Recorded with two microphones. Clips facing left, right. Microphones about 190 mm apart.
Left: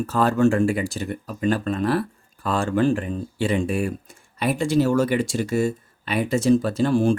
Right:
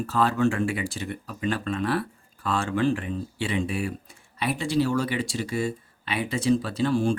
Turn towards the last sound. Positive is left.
turn(degrees=50)  # may be behind; listen again after turning